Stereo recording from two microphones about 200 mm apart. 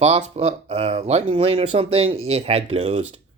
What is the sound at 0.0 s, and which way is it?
Speech, 30° right (ahead or behind).